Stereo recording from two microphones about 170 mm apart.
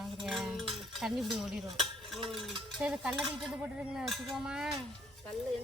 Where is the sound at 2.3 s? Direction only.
Centre (ahead or behind).